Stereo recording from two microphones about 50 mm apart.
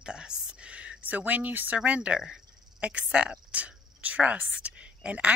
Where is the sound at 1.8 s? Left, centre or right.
Right.